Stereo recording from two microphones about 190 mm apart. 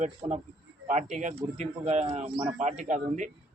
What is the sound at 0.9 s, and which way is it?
A man's voice, 40° right (ahead or behind).